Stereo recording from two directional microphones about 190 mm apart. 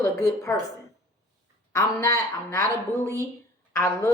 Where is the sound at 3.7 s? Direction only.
15° left (ahead or behind).